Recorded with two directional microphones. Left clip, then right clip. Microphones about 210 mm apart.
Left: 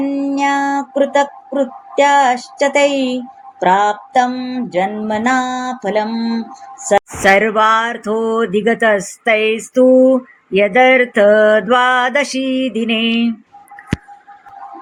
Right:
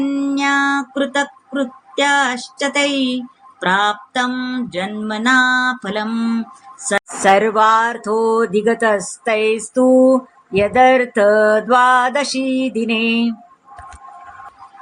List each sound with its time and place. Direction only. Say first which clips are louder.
0.0 s music: left 2 dB; 25° right (ahead or behind)
7.2 s speech: right 1 dB; 10° left (ahead or behind)